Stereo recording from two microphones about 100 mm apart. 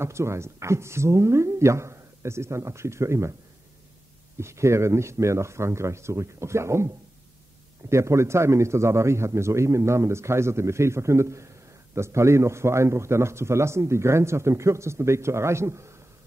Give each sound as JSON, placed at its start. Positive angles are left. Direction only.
{"t": 0.0, "sound": "a man's voice", "side_deg": -25}
{"t": 4.4, "sound": "a man's voice", "side_deg": -25}
{"t": 7.9, "sound": "a man's voice", "side_deg": -30}